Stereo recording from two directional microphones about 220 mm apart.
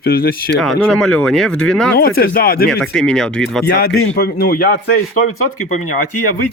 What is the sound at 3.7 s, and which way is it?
Speech, 45° left (ahead or behind).